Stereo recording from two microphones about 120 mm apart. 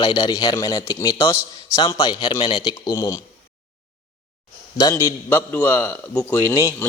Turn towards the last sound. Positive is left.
turn(degrees=20)  # may be behind; listen again after turning